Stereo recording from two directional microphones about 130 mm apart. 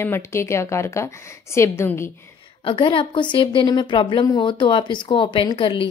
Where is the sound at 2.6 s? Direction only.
40° left (ahead or behind).